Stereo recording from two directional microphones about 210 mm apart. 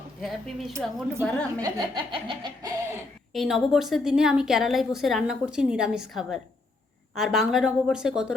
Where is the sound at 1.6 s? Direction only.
20° right (ahead or behind).